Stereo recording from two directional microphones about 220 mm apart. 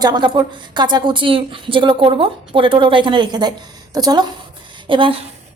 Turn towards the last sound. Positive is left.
turn(degrees=-20)  # may be behind; listen again after turning